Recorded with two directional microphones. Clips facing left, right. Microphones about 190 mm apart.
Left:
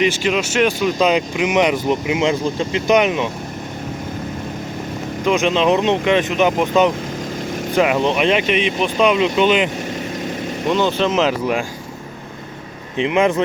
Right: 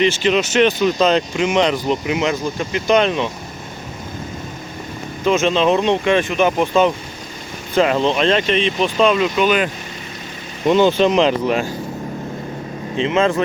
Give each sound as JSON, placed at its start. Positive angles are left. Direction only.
{"t": 0.0, "sound": "speech", "side_deg": 5}
{"t": 5.2, "sound": "speech", "side_deg": 15}
{"t": 10.7, "sound": "speech", "side_deg": 0}
{"t": 13.0, "sound": "speech", "side_deg": 15}